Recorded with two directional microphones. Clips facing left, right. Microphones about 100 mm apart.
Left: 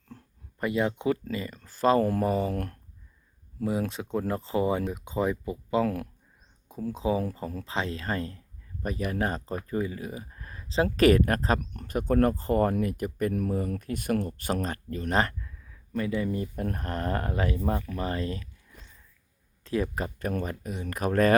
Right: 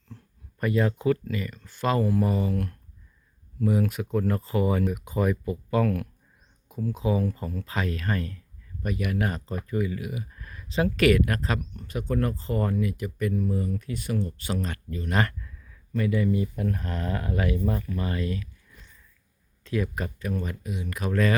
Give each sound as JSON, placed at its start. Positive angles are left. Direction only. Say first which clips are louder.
{"t": 0.6, "sound": "speech", "louder": "right 2 dB", "side_deg": 20}
{"t": 1.5, "sound": "speech", "louder": "left 4 dB", "side_deg": 35}
{"t": 3.6, "sound": "speech", "louder": "right 4 dB", "side_deg": 25}
{"t": 11.7, "sound": "speech", "louder": "left 3 dB", "side_deg": 55}
{"t": 13.3, "sound": "speech", "louder": "right 1 dB", "side_deg": 55}
{"t": 15.1, "sound": "speech", "louder": "even", "side_deg": 25}
{"t": 16.4, "sound": "speech", "louder": "right 3 dB", "side_deg": 45}
{"t": 17.3, "sound": "speech", "louder": "right 1 dB", "side_deg": 35}
{"t": 20.1, "sound": "speech", "louder": "left 1 dB", "side_deg": 45}